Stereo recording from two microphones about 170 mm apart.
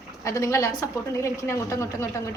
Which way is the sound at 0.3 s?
20° left (ahead or behind).